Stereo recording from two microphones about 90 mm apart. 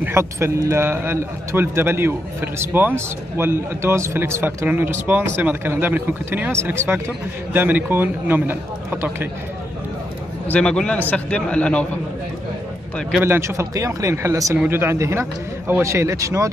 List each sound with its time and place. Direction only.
0.0 s a man's voice: 30° right (ahead or behind)
10.5 s a man's voice: 10° left (ahead or behind)
13.2 s a man's voice: 30° right (ahead or behind)